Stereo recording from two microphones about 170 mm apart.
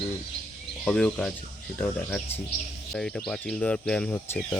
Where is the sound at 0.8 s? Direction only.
10° left (ahead or behind).